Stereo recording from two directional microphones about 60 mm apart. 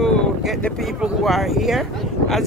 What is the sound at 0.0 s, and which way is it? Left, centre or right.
Wind noise, centre.